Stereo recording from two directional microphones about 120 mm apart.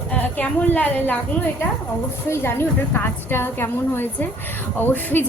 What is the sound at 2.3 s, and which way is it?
A woman's voice, 20° left (ahead or behind).